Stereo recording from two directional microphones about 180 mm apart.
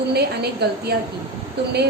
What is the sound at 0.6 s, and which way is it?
Speech, 65° right (ahead or behind).